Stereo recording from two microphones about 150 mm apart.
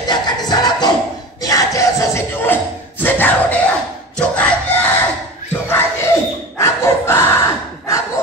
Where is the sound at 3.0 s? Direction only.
15° left (ahead or behind).